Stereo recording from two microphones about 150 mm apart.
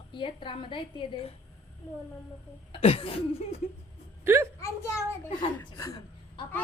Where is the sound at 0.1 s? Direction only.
35° left (ahead or behind).